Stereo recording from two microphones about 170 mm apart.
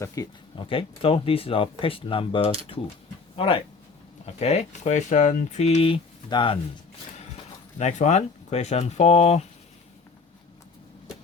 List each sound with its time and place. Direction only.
0.0 s speech: 25° left (ahead or behind)
7.8 s speech: 45° left (ahead or behind)